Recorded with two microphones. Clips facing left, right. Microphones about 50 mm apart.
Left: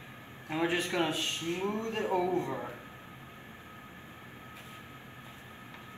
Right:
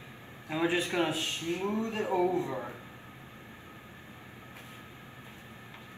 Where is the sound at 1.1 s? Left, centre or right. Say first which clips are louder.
Right 1 dB; left.